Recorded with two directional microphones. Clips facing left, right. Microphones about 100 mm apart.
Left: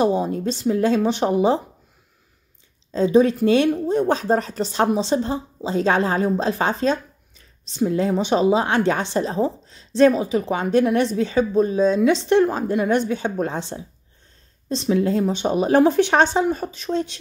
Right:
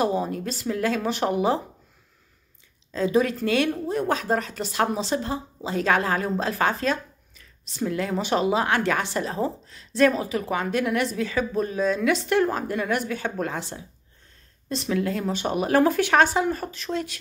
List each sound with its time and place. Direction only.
0.0 s a woman's voice: 25° left (ahead or behind)
2.9 s a woman's voice: 25° left (ahead or behind)